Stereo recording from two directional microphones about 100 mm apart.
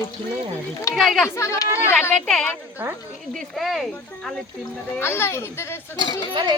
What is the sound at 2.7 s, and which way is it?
Speech, 20° right (ahead or behind).